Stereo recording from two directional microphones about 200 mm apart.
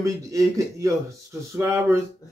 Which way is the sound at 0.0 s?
15° right (ahead or behind).